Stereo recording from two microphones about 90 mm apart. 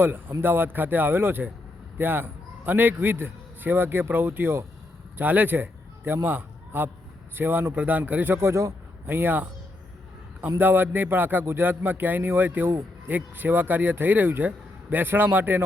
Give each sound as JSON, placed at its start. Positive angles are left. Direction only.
{"t": 0.0, "sound": "a man's voice", "side_deg": -25}
{"t": 10.6, "sound": "a man's voice", "side_deg": -20}